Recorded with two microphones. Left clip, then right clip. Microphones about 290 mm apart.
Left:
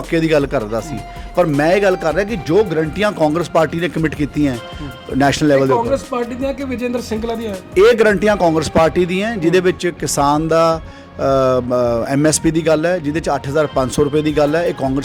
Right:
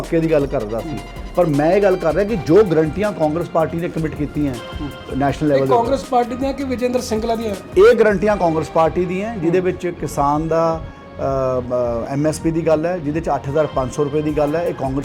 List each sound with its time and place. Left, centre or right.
0.1 s a man's voice: left
3.0 s a man's voice: left
6.1 s speech: left
7.8 s a man's voice: left
11.2 s music: left
12.0 s speech: left